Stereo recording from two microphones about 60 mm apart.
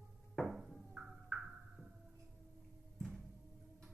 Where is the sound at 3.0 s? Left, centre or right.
Centre.